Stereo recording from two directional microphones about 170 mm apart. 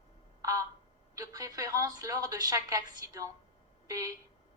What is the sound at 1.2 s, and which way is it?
A woman's voice, 20° right (ahead or behind).